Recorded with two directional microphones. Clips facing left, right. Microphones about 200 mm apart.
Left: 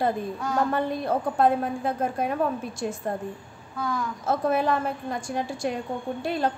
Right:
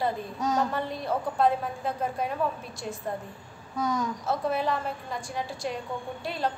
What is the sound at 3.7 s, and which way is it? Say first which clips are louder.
Speech: right 1 dB; 20° right (ahead or behind).